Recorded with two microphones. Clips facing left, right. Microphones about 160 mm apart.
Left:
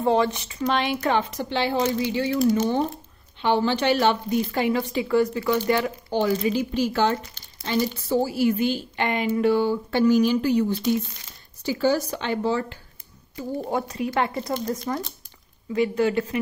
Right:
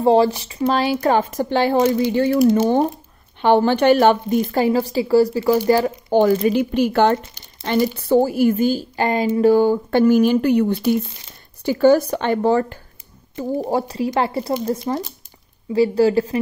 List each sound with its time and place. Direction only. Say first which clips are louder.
0.0 s a woman's voice: right 6 dB; 35° right (ahead or behind); by 12.7 s 50° right (ahead or behind)
13.4 s a woman's voice: right 6 dB; 40° right (ahead or behind)